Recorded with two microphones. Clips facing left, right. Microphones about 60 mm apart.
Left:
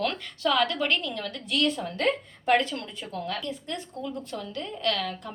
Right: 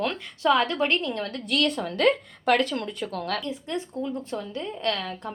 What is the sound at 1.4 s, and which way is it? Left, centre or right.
A woman's voice, right.